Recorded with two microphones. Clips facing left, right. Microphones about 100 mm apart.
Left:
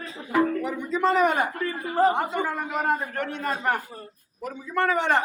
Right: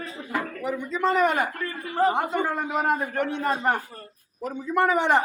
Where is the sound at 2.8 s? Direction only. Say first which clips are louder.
Right 1 dB; 15° right (ahead or behind).